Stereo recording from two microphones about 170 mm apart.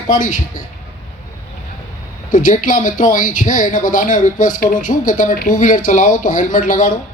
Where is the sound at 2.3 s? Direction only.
50° left (ahead or behind).